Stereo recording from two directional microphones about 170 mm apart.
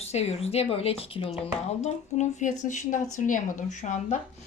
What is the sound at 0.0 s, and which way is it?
Speech, 40° left (ahead or behind).